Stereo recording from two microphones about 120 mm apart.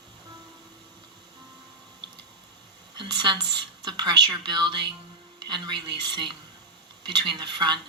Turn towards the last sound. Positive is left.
turn(degrees=-40)  # may be behind; listen again after turning